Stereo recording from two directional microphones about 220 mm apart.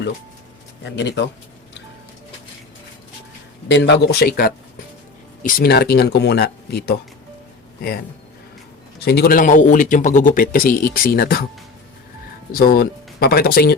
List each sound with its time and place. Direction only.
0.9 s speech: 50° left (ahead or behind)
3.7 s speech: 50° left (ahead or behind)
9.0 s speech: 45° left (ahead or behind)
12.5 s speech: 40° left (ahead or behind)